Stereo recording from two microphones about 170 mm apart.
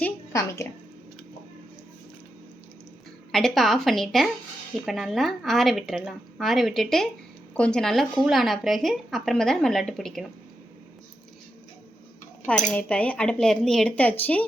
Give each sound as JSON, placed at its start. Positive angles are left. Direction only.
{"t": 0.0, "sound": "a sound", "side_deg": 15}
{"t": 3.3, "sound": "a woman's voice", "side_deg": 0}
{"t": 12.7, "sound": "speech", "side_deg": 5}